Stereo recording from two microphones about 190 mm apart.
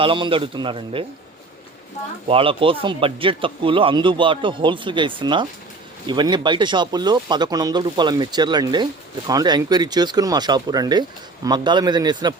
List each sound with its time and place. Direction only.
0.0 s speech: 25° right (ahead or behind)
2.2 s speech: 30° right (ahead or behind)